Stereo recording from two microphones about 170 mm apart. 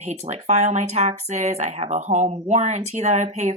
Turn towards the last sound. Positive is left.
turn(degrees=-45)  # may be behind; listen again after turning